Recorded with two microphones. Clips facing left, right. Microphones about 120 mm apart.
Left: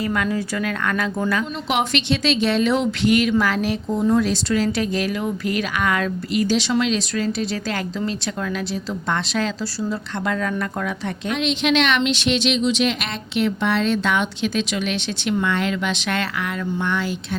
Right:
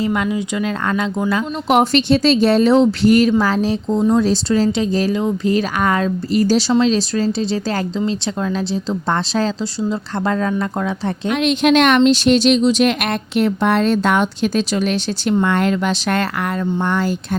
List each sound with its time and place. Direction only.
0.0 s speech: 25° right (ahead or behind)
1.7 s a woman's voice: 40° right (ahead or behind)
11.3 s speech: 50° right (ahead or behind)